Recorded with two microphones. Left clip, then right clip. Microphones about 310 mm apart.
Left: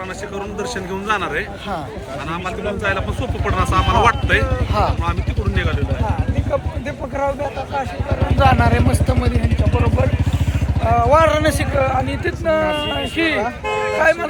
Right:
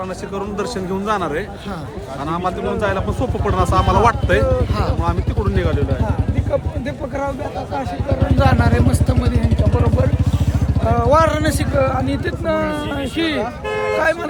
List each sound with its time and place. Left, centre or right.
0.6 s a man's voice: centre
8.4 s speech: centre
10.8 s speech: centre
13.4 s music: left
14.0 s speech: centre